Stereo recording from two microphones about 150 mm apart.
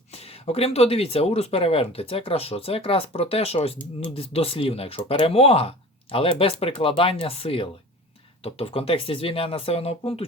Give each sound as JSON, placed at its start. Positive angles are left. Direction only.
{"t": 0.1, "sound": "speech", "side_deg": 45}